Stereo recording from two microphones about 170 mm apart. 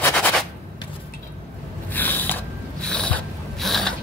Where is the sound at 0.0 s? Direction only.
10° left (ahead or behind).